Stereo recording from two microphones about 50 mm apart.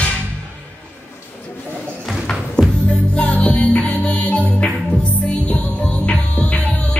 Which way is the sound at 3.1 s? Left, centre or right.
Left.